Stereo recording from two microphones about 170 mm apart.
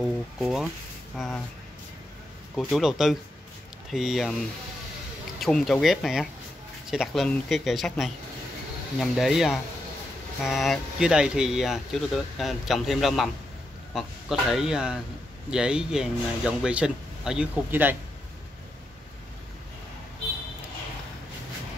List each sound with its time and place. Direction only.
0.0 s speech: centre (ahead or behind)
2.5 s speech: centre (ahead or behind)
5.4 s speech: centre (ahead or behind)